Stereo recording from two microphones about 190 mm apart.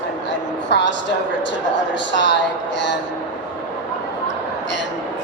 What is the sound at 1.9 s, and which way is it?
A woman's voice, 70° left (ahead or behind).